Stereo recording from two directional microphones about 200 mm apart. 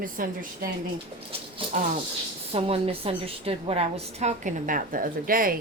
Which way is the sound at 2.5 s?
30° right (ahead or behind).